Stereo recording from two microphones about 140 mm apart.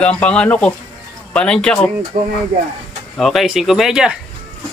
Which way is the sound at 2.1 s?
65° right (ahead or behind).